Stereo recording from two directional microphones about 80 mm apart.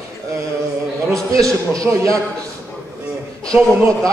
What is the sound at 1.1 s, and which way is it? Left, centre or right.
A man's voice, right.